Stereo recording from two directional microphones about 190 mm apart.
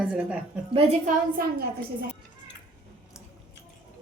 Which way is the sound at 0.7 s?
35° right (ahead or behind).